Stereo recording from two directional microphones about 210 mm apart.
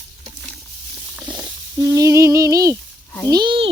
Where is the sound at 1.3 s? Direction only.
20° right (ahead or behind).